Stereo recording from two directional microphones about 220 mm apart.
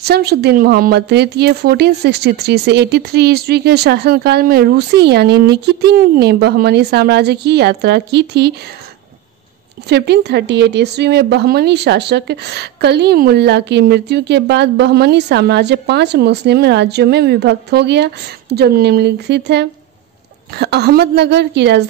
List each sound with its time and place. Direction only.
0.0 s speech: 45° right (ahead or behind)
9.8 s speech: 50° right (ahead or behind)